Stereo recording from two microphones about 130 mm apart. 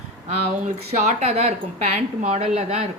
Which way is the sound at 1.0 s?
60° right (ahead or behind).